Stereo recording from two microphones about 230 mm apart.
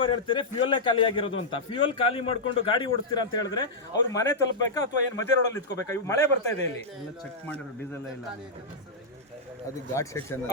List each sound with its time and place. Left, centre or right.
0.0 s a man's voice: left
9.9 s speech: centre